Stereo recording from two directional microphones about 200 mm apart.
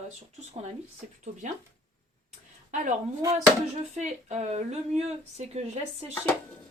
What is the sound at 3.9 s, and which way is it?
Speech, 35° right (ahead or behind).